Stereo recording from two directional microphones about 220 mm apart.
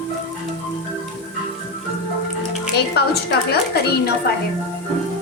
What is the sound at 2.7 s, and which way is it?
A woman's voice, 50° left (ahead or behind).